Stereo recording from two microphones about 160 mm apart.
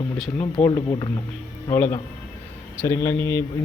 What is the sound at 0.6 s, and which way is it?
Speech, 20° left (ahead or behind).